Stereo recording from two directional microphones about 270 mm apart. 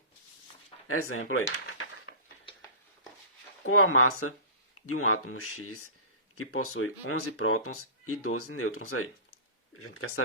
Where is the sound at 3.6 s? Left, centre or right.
Left.